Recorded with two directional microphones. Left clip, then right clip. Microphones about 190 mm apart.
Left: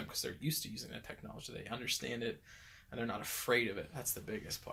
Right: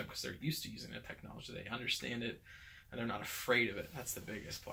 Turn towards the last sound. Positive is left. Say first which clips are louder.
# left 3 dB
turn(degrees=45)  # may be behind; listen again after turning